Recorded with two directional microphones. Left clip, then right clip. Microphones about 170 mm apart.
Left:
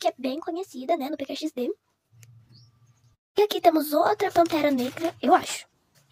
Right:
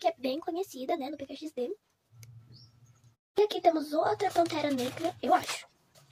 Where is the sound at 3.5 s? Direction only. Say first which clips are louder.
Left 6 dB; 30° left (ahead or behind).